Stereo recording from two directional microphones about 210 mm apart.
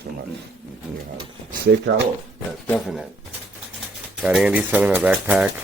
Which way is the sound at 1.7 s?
55° right (ahead or behind).